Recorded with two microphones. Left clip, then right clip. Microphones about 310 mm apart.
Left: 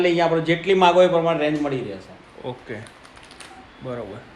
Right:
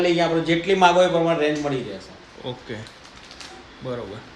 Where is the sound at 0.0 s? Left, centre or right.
Left.